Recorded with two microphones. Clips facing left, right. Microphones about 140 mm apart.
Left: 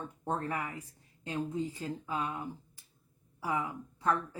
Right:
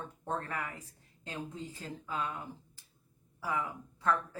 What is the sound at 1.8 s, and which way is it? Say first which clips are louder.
Speech: left 2 dB; 20° left (ahead or behind).